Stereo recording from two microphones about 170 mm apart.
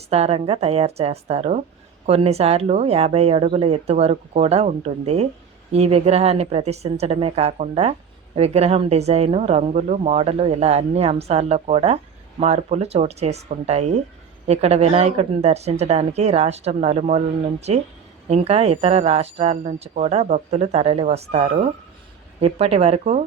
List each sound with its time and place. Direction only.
0.1 s a woman's voice: 35° right (ahead or behind)